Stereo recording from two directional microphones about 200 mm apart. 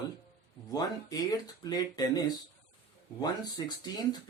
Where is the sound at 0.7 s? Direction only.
20° left (ahead or behind).